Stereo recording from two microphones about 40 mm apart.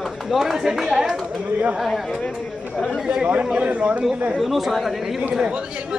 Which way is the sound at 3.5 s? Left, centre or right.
Right.